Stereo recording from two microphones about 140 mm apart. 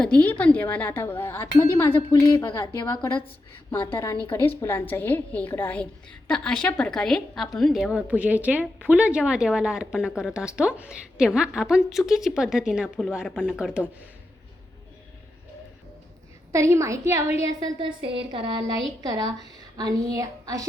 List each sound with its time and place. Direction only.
0.0 s speech: 10° left (ahead or behind)
4.3 s speech: 15° left (ahead or behind); by 13.8 s 5° right (ahead or behind)
16.5 s a woman's voice: 20° right (ahead or behind)
17.7 s a woman's voice: 40° right (ahead or behind)
19.7 s a woman's voice: 25° right (ahead or behind)